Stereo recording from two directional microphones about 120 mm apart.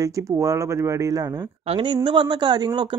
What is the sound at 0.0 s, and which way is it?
Speech, 25° right (ahead or behind).